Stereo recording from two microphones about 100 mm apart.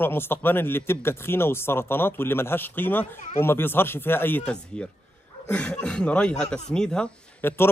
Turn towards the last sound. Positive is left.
turn(degrees=25)  # may be behind; listen again after turning